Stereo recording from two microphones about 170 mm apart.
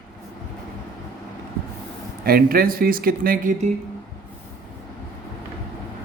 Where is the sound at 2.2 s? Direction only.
60° right (ahead or behind); by 3.7 s 45° right (ahead or behind).